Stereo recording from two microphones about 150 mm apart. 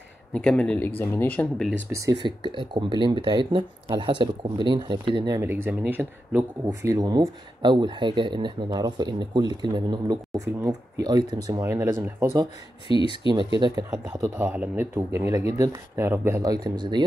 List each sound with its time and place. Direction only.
0.3 s speech: 5° left (ahead or behind)
1.9 s speech: 20° right (ahead or behind)
2.2 s speech: 30° right (ahead or behind)
5.4 s speech: 15° right (ahead or behind)
12.8 s speech: 35° left (ahead or behind)
13.6 s speech: 25° right (ahead or behind)
14.2 s speech: 10° right (ahead or behind); by 17.0 s 30° right (ahead or behind)